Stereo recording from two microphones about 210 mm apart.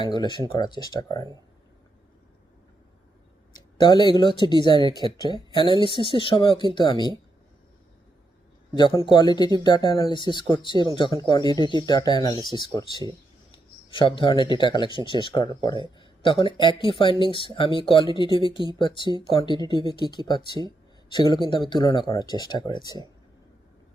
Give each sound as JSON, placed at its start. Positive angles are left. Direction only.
{"t": 0.0, "sound": "speech", "side_deg": 20}
{"t": 3.5, "sound": "speech", "side_deg": 20}
{"t": 9.0, "sound": "speech", "side_deg": 20}